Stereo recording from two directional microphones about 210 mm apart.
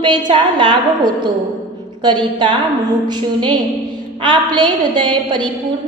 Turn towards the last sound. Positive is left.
turn(degrees=-20)  # may be behind; listen again after turning